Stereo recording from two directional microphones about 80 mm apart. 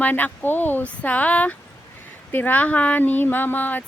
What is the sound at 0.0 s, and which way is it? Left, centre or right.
Speech, left.